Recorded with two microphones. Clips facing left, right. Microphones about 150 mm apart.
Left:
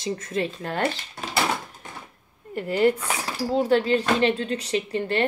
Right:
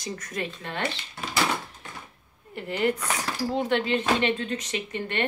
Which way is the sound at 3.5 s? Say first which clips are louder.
Left 5 dB; 35° left (ahead or behind).